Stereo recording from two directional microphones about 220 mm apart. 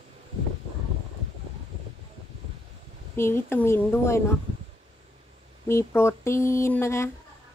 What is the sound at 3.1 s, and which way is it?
Speech, 10° left (ahead or behind).